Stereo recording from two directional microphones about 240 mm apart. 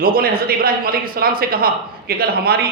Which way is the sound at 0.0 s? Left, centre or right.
Right.